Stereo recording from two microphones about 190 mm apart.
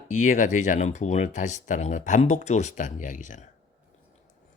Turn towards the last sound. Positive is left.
turn(degrees=40)  # may be behind; listen again after turning